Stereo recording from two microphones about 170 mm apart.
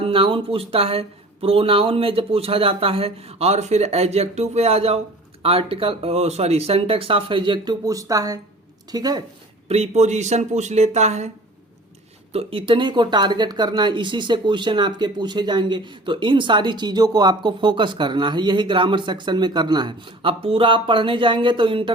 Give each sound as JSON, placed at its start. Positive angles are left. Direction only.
{"t": 0.0, "sound": "speech", "side_deg": -30}
{"t": 9.6, "sound": "speech", "side_deg": -40}
{"t": 12.3, "sound": "speech", "side_deg": -35}